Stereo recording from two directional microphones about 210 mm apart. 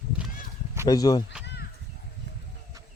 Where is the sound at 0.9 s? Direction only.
20° left (ahead or behind).